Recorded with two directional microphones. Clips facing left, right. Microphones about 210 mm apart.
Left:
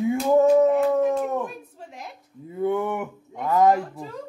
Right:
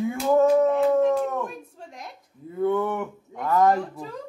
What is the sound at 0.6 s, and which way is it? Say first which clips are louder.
Speech: left 1 dB; 10° left (ahead or behind).